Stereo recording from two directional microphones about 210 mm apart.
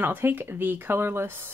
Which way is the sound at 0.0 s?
10° right (ahead or behind).